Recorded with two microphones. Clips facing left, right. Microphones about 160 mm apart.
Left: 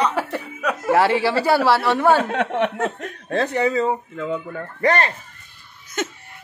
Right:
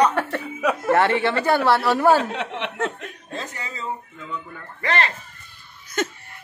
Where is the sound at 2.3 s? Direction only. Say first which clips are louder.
Left 8 dB; 50° left (ahead or behind).